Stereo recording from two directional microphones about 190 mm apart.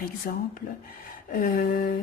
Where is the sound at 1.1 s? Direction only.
45° left (ahead or behind).